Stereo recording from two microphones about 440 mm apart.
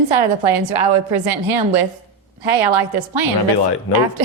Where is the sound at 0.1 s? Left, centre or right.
Right.